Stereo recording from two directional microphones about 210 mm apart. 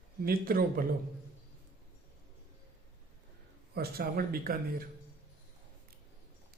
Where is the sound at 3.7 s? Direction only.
45° right (ahead or behind).